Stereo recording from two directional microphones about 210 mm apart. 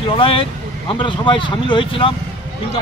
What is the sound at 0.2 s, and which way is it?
Speech, 25° left (ahead or behind).